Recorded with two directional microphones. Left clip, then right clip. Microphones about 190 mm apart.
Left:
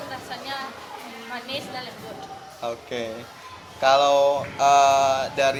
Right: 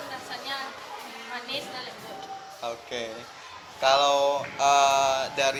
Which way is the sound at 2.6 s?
5° right (ahead or behind).